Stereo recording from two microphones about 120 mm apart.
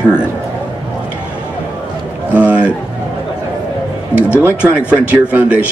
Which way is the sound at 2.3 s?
10° right (ahead or behind).